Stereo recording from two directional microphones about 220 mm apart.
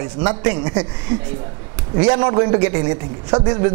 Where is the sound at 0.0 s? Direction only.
15° right (ahead or behind).